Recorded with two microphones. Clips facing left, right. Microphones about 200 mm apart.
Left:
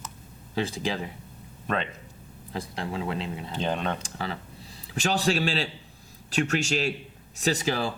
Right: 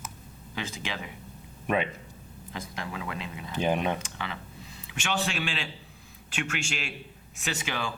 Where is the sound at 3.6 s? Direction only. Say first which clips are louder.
Right 2 dB; 10° right (ahead or behind).